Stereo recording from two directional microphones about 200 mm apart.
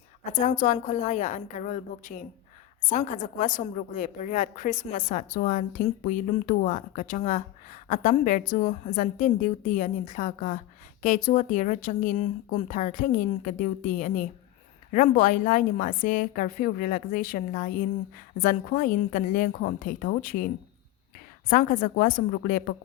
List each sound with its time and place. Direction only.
0.3 s a woman's voice: 35° left (ahead or behind)